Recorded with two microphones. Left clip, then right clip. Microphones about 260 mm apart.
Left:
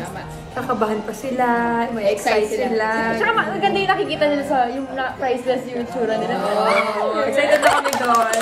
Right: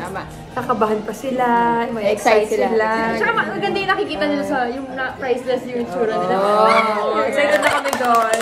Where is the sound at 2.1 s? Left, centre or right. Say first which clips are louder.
Right 5 dB; centre.